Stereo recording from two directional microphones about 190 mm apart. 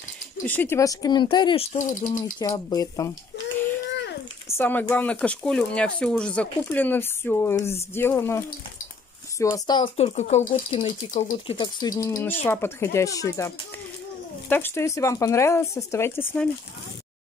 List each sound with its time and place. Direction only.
0.5 s speech: 10° left (ahead or behind); by 2.1 s 40° left (ahead or behind)
2.3 s speech: 20° left (ahead or behind)
4.5 s speech: 10° left (ahead or behind)
9.9 s speech: 35° left (ahead or behind); by 13.5 s 15° left (ahead or behind)
14.5 s speech: 10° left (ahead or behind)